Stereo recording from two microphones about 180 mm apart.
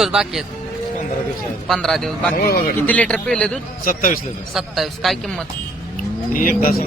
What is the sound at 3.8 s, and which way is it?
Speech, 50° left (ahead or behind).